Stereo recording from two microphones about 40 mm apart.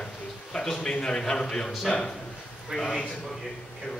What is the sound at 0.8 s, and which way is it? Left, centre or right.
A man's voice, left.